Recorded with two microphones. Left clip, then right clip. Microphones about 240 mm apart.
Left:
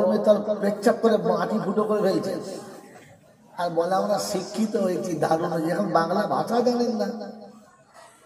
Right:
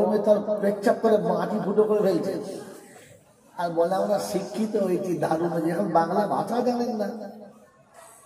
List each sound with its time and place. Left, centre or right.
0.1 s a man's voice: left
3.5 s a man's voice: left